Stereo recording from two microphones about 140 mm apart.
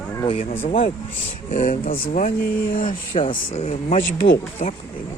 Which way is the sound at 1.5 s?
75° left (ahead or behind).